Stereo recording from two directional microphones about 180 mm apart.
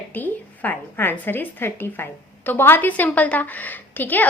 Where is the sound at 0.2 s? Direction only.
10° left (ahead or behind).